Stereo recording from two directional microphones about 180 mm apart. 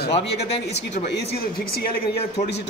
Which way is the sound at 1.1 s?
65° left (ahead or behind).